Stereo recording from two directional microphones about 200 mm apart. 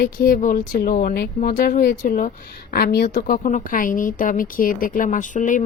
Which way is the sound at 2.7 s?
50° left (ahead or behind).